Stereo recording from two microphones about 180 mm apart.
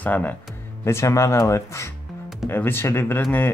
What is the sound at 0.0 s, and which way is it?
Speech, 10° left (ahead or behind).